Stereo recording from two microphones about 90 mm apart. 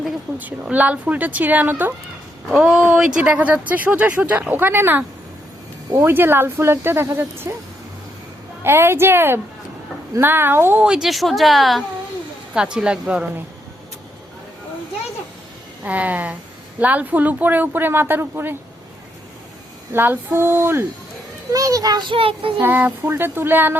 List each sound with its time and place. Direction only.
0.3 s speech: 20° right (ahead or behind)
2.5 s speech: 5° right (ahead or behind); by 7.5 s 25° right (ahead or behind)
8.6 s speech: 25° right (ahead or behind)
10.8 s a woman's voice: 5° right (ahead or behind)
15.8 s speech: 15° right (ahead or behind)
19.9 s speech: 25° right (ahead or behind)
21.5 s a child's voice: 40° right (ahead or behind)
22.1 s child singing: 85° right
22.6 s speech: 20° right (ahead or behind)